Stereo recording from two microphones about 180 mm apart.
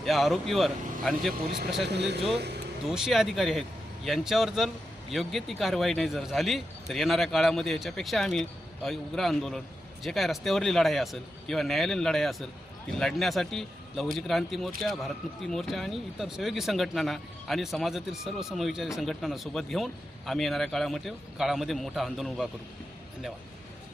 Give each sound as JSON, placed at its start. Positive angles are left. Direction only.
{"t": 0.0, "sound": "speech", "side_deg": 0}
{"t": 1.9, "sound": "speech", "side_deg": -70}
{"t": 2.8, "sound": "speech", "side_deg": 0}